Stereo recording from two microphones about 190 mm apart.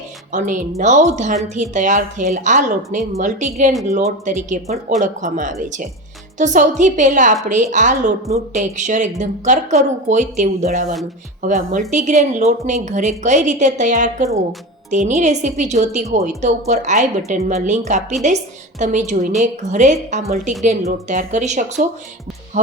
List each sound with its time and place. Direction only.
0.3 s a woman's voice: 40° right (ahead or behind)